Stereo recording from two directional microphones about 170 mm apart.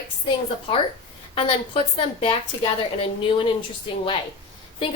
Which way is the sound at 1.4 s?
35° left (ahead or behind).